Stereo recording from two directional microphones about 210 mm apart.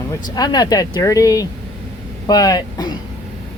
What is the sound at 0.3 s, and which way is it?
Speech, 20° left (ahead or behind).